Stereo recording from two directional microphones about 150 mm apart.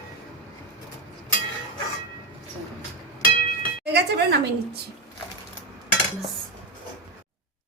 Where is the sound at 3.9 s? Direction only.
90° right.